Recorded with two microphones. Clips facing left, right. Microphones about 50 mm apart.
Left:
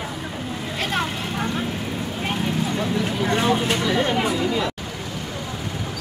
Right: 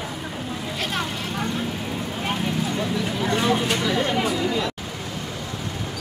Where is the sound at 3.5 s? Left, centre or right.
Centre.